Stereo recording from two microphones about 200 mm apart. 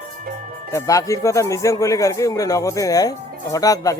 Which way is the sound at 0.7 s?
15° left (ahead or behind).